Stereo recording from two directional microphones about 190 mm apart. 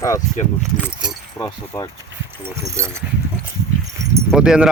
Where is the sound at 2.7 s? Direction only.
15° right (ahead or behind).